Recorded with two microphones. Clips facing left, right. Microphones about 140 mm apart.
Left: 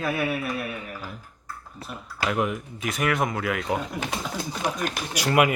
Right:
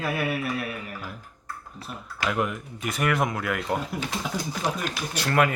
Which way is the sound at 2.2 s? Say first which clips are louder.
Left 1 dB; centre (ahead or behind).